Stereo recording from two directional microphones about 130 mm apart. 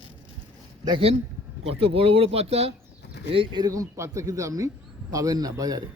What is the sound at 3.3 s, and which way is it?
A man's voice, 40° right (ahead or behind).